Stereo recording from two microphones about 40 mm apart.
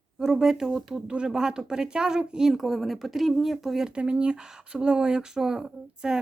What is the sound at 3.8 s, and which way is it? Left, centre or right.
A woman's voice, right.